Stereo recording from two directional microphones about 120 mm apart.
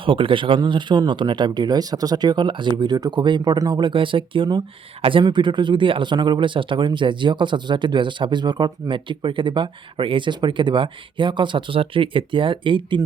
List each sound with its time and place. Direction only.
0.0 s speech: 45° right (ahead or behind)